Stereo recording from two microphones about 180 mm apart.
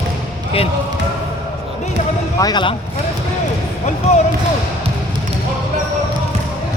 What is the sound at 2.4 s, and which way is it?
Speech, 25° left (ahead or behind).